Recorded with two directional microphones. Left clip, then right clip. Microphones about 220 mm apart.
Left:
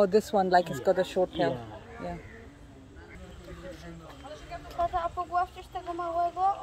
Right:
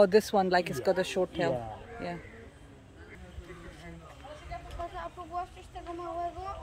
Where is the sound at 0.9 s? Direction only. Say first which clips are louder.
Left 3 dB; 15° right (ahead or behind).